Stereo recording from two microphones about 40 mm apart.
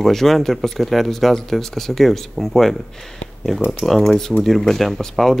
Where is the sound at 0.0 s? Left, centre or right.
Centre.